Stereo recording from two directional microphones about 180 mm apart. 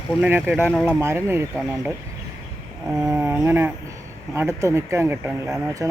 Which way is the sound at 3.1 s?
15° right (ahead or behind).